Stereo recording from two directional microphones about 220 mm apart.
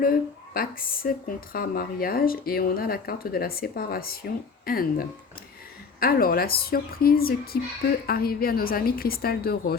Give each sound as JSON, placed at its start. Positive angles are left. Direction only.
{"t": 0.0, "sound": "speech", "side_deg": 40}